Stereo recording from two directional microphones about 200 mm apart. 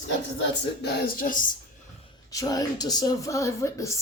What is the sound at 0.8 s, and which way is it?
Speech, 45° left (ahead or behind).